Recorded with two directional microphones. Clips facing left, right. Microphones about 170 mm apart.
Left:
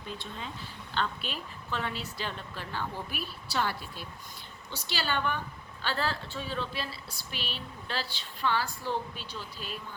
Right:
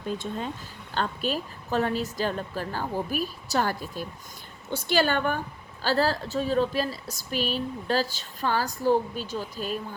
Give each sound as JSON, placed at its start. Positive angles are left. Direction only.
{"t": 0.2, "sound": "a woman's voice", "side_deg": -45}